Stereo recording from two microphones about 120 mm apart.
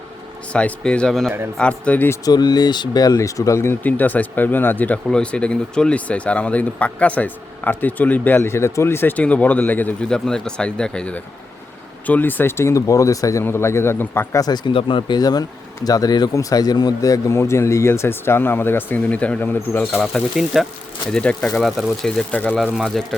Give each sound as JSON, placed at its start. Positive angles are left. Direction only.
{"t": 0.5, "sound": "speech", "side_deg": 10}
{"t": 2.2, "sound": "speech", "side_deg": 35}
{"t": 14.4, "sound": "speech", "side_deg": 40}
{"t": 20.3, "sound": "speech", "side_deg": -5}
{"t": 22.6, "sound": "speech", "side_deg": 0}